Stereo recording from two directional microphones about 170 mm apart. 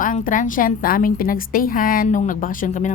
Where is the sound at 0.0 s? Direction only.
50° left (ahead or behind).